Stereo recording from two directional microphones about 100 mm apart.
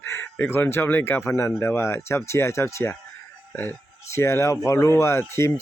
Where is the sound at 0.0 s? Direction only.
25° left (ahead or behind).